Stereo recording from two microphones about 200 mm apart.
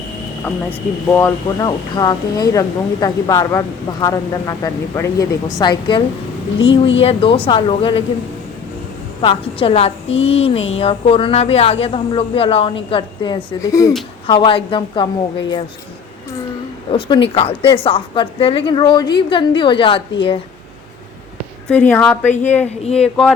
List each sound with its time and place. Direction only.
1.0 s a woman's voice: 15° left (ahead or behind)
6.6 s speech: 65° left (ahead or behind)
7.0 s a woman's voice: 30° left (ahead or behind)
9.2 s a woman's voice: 25° left (ahead or behind)
16.9 s a woman's voice: 25° left (ahead or behind)
21.7 s speech: 10° left (ahead or behind)
22.8 s speech: 30° left (ahead or behind)